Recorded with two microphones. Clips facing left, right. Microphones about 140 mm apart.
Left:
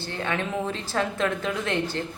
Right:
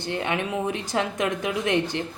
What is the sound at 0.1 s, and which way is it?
A woman's voice, 15° right (ahead or behind).